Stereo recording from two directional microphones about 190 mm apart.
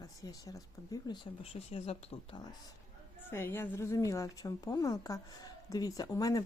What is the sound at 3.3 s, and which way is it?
A woman's voice, 10° left (ahead or behind).